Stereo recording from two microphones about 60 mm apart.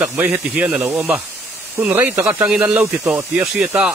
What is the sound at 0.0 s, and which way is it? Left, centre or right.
Speech, right.